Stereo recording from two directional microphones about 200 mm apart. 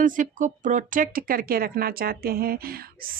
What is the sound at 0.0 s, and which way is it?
Speech, 40° right (ahead or behind).